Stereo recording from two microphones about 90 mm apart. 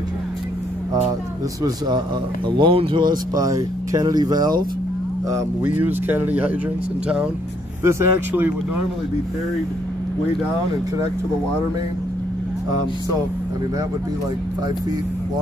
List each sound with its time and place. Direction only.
1.6 s a man's voice: 55° right (ahead or behind); by 3.0 s 80° right
3.0 s speech: 45° right (ahead or behind)
5.6 s speech: 20° right (ahead or behind)
7.8 s speech: 30° right (ahead or behind)